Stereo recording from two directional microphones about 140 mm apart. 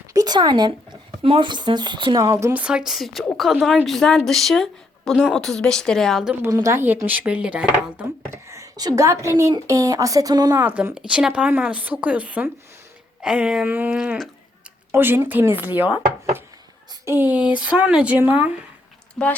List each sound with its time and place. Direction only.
0.1 s speech: 30° right (ahead or behind)
2.3 s speech: 15° right (ahead or behind); by 6.3 s centre (ahead or behind)
6.4 s speech: 20° right (ahead or behind)
10.6 s speech: 10° right (ahead or behind)
14.9 s speech: 15° right (ahead or behind)